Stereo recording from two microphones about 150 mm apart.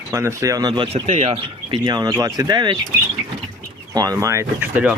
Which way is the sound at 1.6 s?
25° right (ahead or behind).